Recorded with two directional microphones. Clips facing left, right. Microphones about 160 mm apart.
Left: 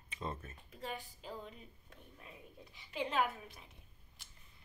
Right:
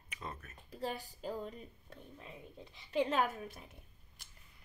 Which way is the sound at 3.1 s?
45° right (ahead or behind).